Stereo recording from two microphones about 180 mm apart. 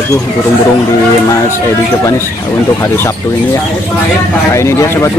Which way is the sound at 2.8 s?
15° left (ahead or behind).